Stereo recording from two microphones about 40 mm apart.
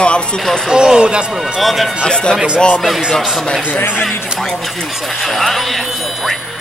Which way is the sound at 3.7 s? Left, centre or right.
Left.